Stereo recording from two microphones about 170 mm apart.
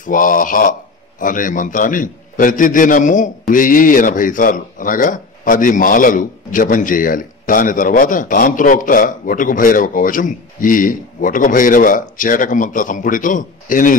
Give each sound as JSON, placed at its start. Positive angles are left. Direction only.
{"t": 0.0, "sound": "a man's voice", "side_deg": 50}